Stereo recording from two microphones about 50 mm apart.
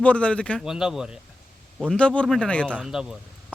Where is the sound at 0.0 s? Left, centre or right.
Left.